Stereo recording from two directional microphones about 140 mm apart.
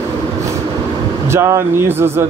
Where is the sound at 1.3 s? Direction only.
20° right (ahead or behind).